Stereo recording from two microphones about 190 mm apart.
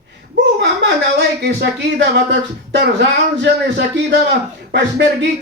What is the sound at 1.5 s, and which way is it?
Speech, 65° right (ahead or behind).